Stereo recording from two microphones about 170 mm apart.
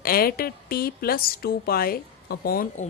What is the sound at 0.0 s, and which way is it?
A woman's voice, 60° left (ahead or behind).